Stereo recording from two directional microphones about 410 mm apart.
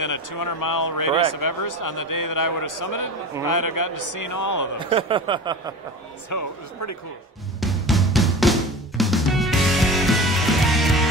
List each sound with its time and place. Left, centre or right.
0.0 s a man's voice: left
4.7 s a sound: centre
6.3 s speech: left
7.6 s drum: centre